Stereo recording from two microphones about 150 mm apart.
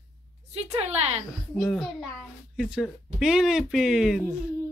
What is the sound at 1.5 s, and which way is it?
Speech, centre (ahead or behind).